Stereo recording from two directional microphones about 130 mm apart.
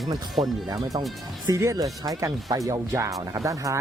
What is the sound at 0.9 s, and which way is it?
Speech, 30° right (ahead or behind).